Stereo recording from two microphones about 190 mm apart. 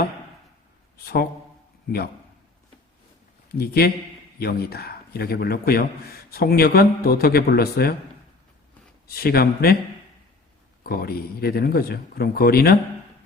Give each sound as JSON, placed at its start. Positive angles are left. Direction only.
{"t": 0.9, "sound": "a man's voice", "side_deg": 55}
{"t": 3.6, "sound": "a man's voice", "side_deg": 55}
{"t": 9.0, "sound": "a man's voice", "side_deg": 55}
{"t": 10.8, "sound": "a man's voice", "side_deg": 55}